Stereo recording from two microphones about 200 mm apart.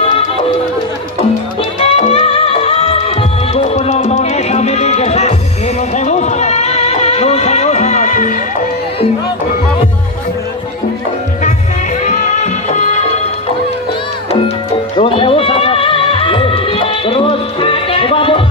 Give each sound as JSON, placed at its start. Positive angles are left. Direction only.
{"t": 1.8, "sound": "music", "side_deg": 30}
{"t": 12.0, "sound": "music", "side_deg": 35}
{"t": 14.3, "sound": "music", "side_deg": 25}